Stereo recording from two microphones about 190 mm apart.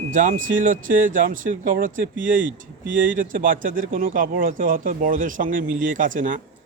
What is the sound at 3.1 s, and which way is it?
Speech, 45° right (ahead or behind).